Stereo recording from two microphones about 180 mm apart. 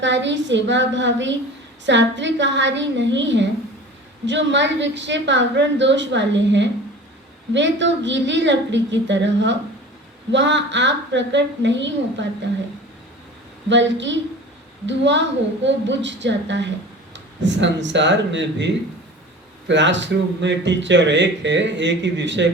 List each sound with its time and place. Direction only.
0.0 s speech: 85° right
13.7 s speech: 90° right